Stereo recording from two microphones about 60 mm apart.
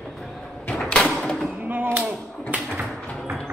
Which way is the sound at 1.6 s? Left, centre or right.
Right.